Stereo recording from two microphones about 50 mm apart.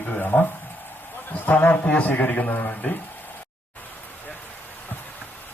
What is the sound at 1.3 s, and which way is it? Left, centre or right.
A man's voice, left.